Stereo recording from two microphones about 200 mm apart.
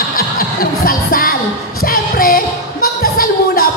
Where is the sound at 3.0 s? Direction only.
45° left (ahead or behind).